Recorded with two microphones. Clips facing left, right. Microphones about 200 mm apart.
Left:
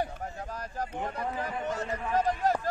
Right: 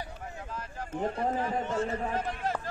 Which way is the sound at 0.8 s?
35° right (ahead or behind).